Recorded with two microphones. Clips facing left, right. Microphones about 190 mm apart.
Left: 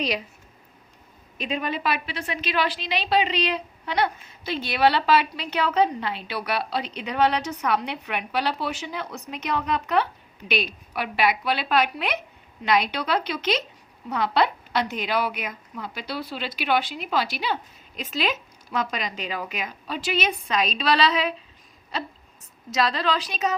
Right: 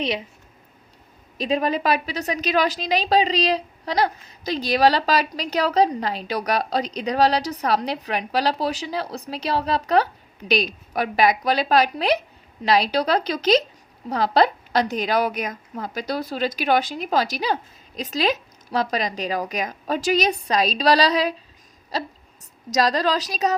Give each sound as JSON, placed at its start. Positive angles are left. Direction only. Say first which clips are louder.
{"t": 1.4, "sound": "a woman's voice", "louder": "right 6 dB", "side_deg": -35}